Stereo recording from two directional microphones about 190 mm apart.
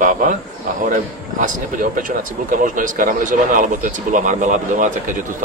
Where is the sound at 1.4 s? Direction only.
45° right (ahead or behind).